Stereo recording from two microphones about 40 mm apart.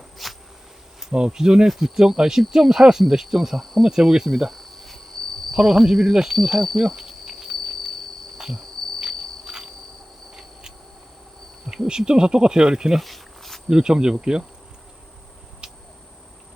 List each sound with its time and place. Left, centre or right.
0.2 s a sound: centre
1.1 s speech: centre
3.1 s cricket: centre
3.8 s speech: centre
4.5 s cricket: centre
5.5 s speech: centre
7.7 s cricket: centre
8.5 s insect: centre
9.5 s cricket: centre
11.9 s speech: centre
13.0 s cricket: centre
13.7 s speech: centre
15.6 s a sound: right